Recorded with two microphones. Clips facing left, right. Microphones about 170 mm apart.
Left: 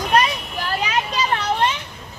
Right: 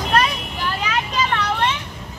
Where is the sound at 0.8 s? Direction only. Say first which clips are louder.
Even; 20° left (ahead or behind).